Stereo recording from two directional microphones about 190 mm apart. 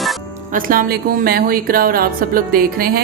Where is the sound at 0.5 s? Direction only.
50° right (ahead or behind).